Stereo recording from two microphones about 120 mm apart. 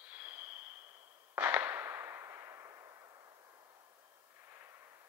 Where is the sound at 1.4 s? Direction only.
15° right (ahead or behind).